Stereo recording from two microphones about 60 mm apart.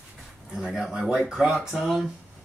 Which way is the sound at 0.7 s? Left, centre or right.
Centre.